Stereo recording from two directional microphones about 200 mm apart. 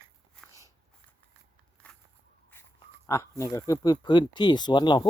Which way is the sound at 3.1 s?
15° left (ahead or behind).